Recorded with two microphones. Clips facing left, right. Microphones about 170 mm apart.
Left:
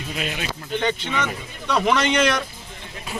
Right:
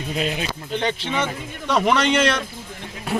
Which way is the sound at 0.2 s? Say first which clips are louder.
Right 4 dB; 30° right (ahead or behind).